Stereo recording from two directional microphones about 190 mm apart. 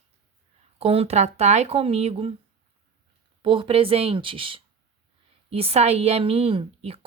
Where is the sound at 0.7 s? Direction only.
30° right (ahead or behind).